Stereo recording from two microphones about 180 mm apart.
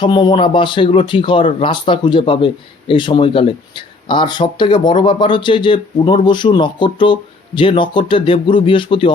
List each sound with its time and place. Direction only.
0.0 s speech: 25° left (ahead or behind)